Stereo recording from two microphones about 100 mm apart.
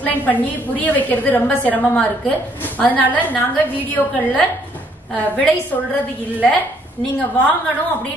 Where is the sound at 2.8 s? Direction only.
15° left (ahead or behind).